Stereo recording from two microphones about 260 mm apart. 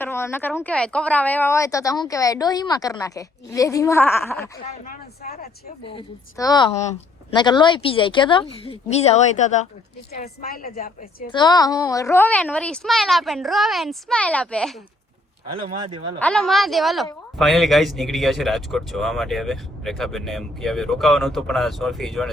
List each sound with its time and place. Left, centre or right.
0.0 s a woman's voice: centre
5.2 s a woman's voice: left
5.9 s a woman's voice: centre; by 11.3 s left
11.3 s speech: centre
16.1 s speech: centre